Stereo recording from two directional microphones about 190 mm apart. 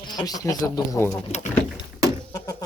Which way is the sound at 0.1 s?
20° left (ahead or behind).